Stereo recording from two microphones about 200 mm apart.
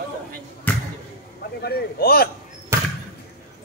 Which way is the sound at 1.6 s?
50° left (ahead or behind).